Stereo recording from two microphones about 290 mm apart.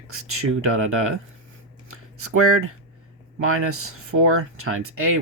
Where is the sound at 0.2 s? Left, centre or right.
Right.